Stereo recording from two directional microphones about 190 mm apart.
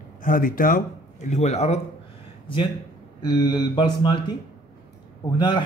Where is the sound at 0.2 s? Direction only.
45° left (ahead or behind).